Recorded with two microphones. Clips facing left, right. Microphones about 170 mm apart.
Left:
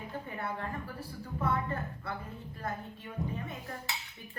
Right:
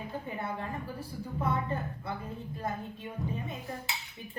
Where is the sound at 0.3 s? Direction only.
15° right (ahead or behind).